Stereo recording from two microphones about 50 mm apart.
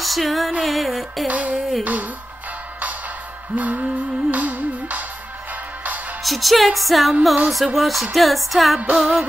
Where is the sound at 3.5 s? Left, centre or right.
Right.